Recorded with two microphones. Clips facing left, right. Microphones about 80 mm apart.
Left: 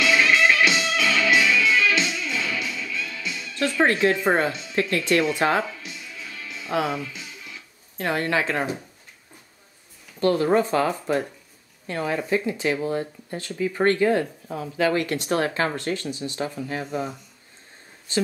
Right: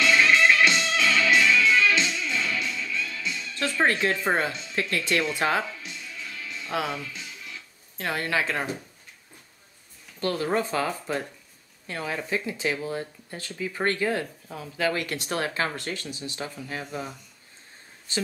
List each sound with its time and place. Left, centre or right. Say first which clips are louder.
0.0 s music: left 1 dB; centre
8.0 s speech: left 4 dB; left
10.2 s speech: left 7 dB; centre
10.7 s speech: left 5 dB; centre